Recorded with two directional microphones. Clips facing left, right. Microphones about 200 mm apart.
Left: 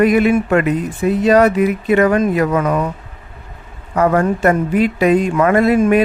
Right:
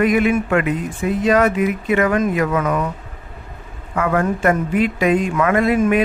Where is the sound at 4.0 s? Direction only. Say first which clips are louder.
Left 4 dB; 40° left (ahead or behind).